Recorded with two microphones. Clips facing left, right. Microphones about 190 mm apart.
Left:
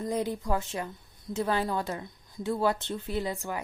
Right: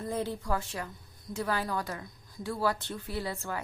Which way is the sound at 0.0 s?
15° left (ahead or behind).